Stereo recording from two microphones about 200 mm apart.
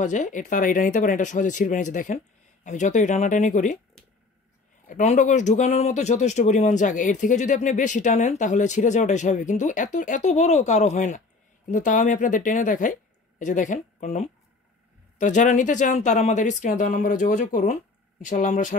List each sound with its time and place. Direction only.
0.0 s speech: 40° left (ahead or behind)
4.8 s speech: 35° left (ahead or behind)